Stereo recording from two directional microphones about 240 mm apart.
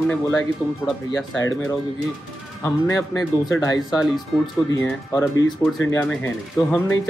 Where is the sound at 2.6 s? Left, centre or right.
Centre.